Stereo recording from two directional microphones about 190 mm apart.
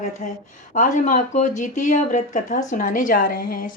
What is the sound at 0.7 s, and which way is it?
Speech, 40° left (ahead or behind).